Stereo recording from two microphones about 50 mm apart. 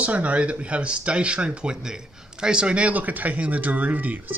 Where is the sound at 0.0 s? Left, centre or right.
Right.